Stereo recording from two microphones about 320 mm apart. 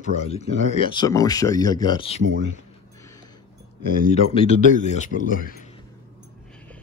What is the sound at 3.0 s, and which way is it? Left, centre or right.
Music, centre.